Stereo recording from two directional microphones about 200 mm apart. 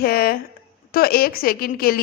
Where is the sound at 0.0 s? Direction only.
50° left (ahead or behind).